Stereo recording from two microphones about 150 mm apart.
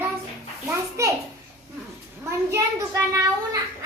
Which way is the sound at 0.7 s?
20° right (ahead or behind).